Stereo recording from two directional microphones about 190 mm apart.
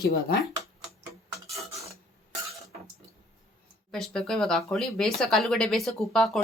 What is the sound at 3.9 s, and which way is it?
Speech, centre (ahead or behind).